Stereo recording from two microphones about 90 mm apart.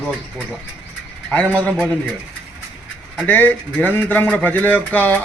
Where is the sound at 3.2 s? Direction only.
20° left (ahead or behind).